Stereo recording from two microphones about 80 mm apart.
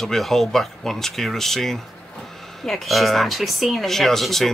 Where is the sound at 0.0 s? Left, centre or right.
Centre.